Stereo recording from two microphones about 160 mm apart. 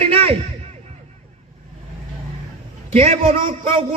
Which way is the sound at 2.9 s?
40° right (ahead or behind).